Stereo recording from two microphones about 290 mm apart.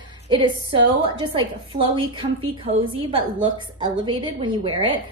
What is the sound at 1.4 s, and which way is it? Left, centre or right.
A woman's voice, centre.